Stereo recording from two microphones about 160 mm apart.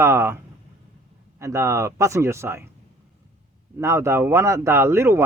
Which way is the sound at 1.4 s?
15° right (ahead or behind).